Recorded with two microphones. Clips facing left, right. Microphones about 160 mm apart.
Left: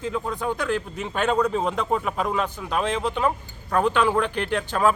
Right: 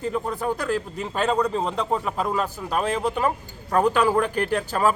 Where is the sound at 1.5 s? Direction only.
5° left (ahead or behind).